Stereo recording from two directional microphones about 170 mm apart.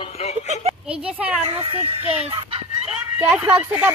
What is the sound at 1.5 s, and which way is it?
Speech, 35° right (ahead or behind).